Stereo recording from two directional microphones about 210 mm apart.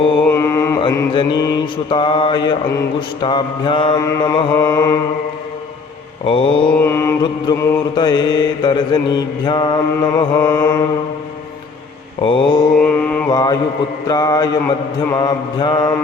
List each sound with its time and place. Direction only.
0.3 s mantra: 10° left (ahead or behind)
1.1 s mantra: 25° left (ahead or behind)
6.2 s mantra: 25° left (ahead or behind)
6.7 s mantra: 10° left (ahead or behind)
12.2 s mantra: 25° left (ahead or behind)
12.8 s mantra: 5° left (ahead or behind)
13.3 s mantra: 20° left (ahead or behind)